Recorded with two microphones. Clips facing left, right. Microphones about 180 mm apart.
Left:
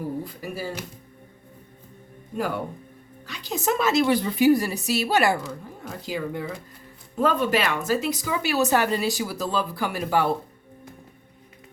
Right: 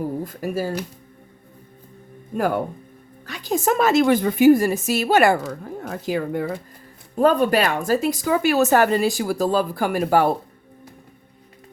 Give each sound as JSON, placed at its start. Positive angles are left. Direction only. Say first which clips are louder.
{"t": 0.3, "sound": "a woman's voice", "louder": "right 7 dB", "side_deg": -45}
{"t": 3.2, "sound": "a woman's voice", "louder": "right 5 dB", "side_deg": -45}
{"t": 7.2, "sound": "a woman's voice", "louder": "right 5 dB", "side_deg": -45}